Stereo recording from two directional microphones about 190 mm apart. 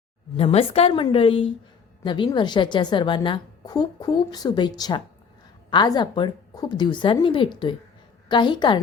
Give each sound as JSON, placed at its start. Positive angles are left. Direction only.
{"t": 0.3, "sound": "a woman's voice", "side_deg": 30}